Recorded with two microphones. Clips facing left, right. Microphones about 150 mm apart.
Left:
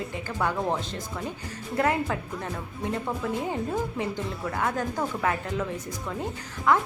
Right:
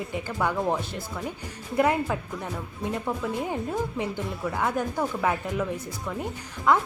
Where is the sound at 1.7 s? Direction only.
15° right (ahead or behind).